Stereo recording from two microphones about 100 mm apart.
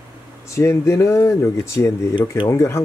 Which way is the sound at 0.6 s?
25° left (ahead or behind).